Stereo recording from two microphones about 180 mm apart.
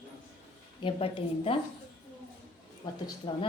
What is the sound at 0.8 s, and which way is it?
Speech, 30° left (ahead or behind).